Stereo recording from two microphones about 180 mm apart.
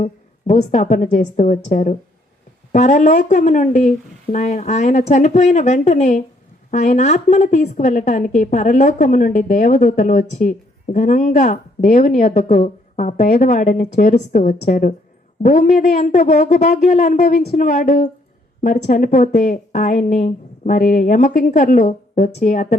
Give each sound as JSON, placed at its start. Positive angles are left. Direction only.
{"t": 0.0, "sound": "a woman's voice", "side_deg": 40}